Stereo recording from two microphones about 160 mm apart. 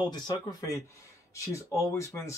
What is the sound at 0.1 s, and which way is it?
Speech, 25° left (ahead or behind).